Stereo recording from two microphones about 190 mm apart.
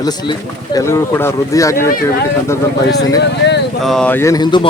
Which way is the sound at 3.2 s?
65° left (ahead or behind).